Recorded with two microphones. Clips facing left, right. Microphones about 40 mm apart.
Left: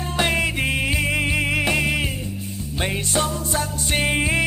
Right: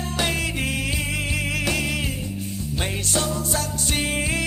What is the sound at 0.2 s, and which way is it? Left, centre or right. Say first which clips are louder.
Music: left 4 dB; left.